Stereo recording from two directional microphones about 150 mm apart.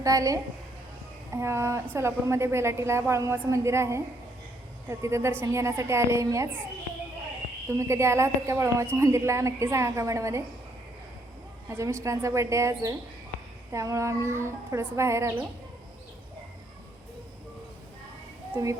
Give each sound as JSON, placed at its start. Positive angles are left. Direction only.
{"t": 0.0, "sound": "a woman's voice", "side_deg": -20}
{"t": 7.8, "sound": "speech", "side_deg": -20}
{"t": 11.7, "sound": "a woman's voice", "side_deg": -15}
{"t": 18.5, "sound": "speech", "side_deg": -20}